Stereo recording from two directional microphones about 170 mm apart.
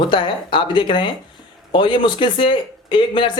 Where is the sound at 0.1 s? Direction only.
30° left (ahead or behind).